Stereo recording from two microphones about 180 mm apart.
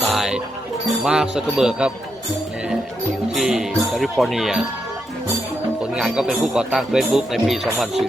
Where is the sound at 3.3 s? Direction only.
Centre (ahead or behind).